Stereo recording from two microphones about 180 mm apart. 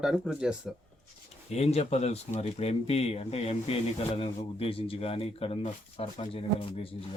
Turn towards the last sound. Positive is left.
turn(degrees=30)  # may be behind; listen again after turning